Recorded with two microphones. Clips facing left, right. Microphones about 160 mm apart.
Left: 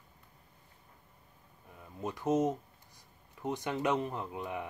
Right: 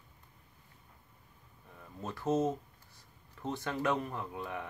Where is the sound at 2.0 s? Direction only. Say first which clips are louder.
Left 1 dB; 15° left (ahead or behind).